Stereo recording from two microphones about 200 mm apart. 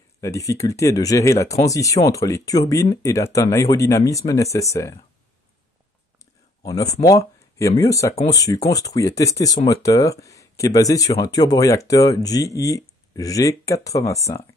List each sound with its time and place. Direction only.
0.2 s speech: 15° left (ahead or behind)
6.6 s speech: 20° left (ahead or behind)